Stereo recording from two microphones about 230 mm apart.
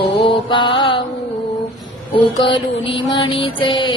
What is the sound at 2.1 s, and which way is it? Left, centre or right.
Mantra, left.